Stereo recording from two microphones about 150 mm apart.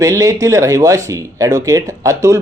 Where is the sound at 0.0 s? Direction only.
20° right (ahead or behind).